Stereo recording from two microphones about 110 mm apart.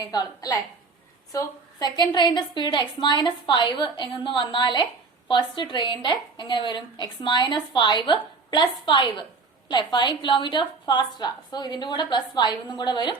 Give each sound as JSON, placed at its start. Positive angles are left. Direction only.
{"t": 0.0, "sound": "a woman's voice", "side_deg": 35}